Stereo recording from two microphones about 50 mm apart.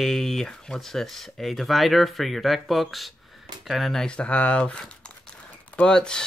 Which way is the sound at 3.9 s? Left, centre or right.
Centre.